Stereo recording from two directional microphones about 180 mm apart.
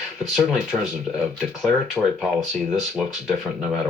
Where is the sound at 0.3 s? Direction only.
Centre (ahead or behind).